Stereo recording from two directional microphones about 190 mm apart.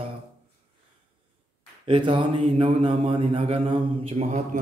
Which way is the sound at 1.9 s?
25° right (ahead or behind).